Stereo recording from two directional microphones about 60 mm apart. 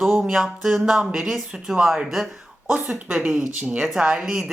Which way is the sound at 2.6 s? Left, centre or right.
Right.